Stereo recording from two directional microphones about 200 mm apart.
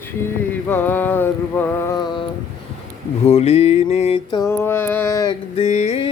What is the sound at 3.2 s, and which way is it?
Mantra, 30° left (ahead or behind).